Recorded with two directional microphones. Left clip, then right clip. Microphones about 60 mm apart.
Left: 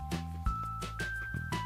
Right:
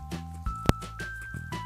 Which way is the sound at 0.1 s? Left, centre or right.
Centre.